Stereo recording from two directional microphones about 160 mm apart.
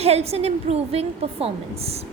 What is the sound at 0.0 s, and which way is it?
A woman's voice, 40° right (ahead or behind).